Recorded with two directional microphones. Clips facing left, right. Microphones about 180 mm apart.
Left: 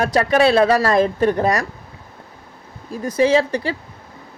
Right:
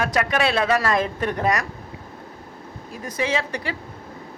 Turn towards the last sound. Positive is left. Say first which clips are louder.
# left 8 dB
turn(degrees=30)  # may be behind; listen again after turning